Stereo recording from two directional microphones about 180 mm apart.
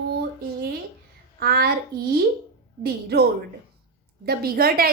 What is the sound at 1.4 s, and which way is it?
Speech, 60° right (ahead or behind).